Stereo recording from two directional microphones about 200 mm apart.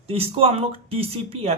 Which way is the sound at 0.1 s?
30° right (ahead or behind).